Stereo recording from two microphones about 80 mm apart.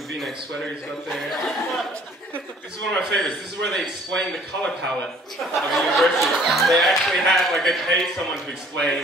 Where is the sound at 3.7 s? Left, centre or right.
Centre.